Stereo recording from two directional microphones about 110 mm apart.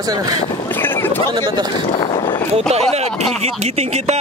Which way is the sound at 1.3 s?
45° right (ahead or behind).